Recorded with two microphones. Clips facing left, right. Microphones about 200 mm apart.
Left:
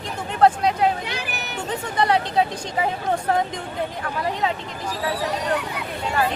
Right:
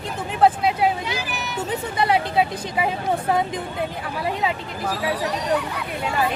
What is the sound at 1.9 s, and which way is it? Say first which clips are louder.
Speech: even; 5° right (ahead or behind).